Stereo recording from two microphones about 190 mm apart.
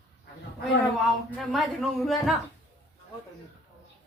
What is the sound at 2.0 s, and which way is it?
Speech, centre (ahead or behind).